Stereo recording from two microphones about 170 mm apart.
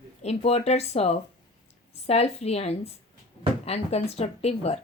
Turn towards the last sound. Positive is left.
turn(degrees=40)  # may be behind; listen again after turning